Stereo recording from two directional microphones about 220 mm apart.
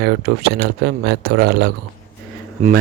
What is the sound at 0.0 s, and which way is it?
Speech, 45° right (ahead or behind).